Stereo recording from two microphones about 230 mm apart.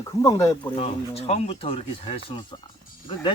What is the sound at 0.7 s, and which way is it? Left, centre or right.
Speech, left.